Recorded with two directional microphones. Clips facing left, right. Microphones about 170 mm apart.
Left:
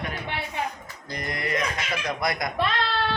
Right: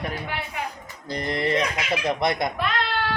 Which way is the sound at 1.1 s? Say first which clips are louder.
Right 5 dB; 30° right (ahead or behind).